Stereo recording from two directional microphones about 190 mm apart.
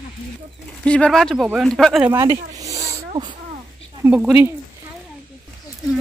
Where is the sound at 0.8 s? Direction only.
5° left (ahead or behind).